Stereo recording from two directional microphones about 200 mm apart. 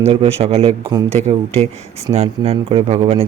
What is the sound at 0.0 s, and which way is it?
A man's voice, 30° right (ahead or behind).